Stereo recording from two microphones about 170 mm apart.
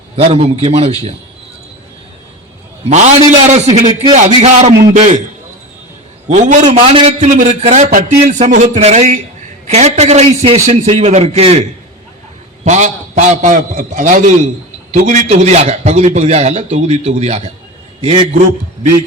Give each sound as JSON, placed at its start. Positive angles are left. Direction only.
{"t": 0.2, "sound": "a man's voice", "side_deg": -40}
{"t": 2.9, "sound": "a man's voice", "side_deg": -40}
{"t": 6.2, "sound": "a man's voice", "side_deg": -45}
{"t": 12.6, "sound": "a man's voice", "side_deg": -45}